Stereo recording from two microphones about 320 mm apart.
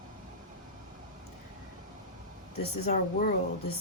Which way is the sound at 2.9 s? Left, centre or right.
Left.